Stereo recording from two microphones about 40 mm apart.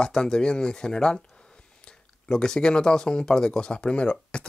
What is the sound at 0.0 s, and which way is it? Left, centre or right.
Speech, centre.